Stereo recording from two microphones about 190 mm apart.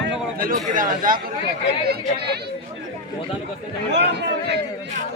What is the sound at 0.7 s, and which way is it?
Speech, 45° right (ahead or behind).